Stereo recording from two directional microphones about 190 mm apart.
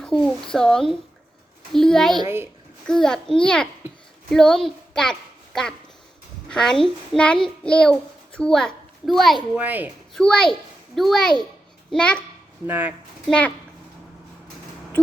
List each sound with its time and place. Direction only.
0.0 s a child's voice: 5° left (ahead or behind)
2.1 s speech: 15° right (ahead or behind)
2.8 s a child's voice: 5° left (ahead or behind)
6.5 s a child's voice: 5° left (ahead or behind)
10.2 s a child's voice: 5° left (ahead or behind)
12.6 s speech: 10° right (ahead or behind)